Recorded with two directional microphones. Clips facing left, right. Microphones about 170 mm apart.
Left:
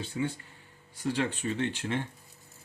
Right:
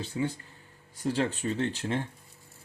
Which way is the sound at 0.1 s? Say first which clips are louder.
Right 1 dB; 30° right (ahead or behind).